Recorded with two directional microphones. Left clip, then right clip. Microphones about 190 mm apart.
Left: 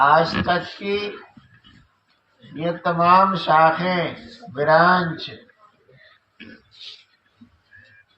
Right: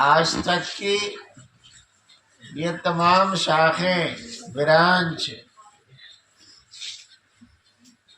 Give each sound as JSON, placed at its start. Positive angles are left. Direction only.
{"t": 0.0, "sound": "speech", "side_deg": -55}
{"t": 2.6, "sound": "speech", "side_deg": -55}